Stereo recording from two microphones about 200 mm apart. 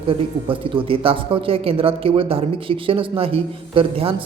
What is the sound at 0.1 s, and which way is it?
A man's voice, 25° right (ahead or behind).